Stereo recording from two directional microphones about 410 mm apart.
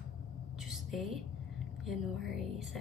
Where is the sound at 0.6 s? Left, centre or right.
Centre.